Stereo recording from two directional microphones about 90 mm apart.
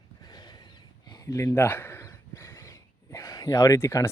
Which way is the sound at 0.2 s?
50° left (ahead or behind).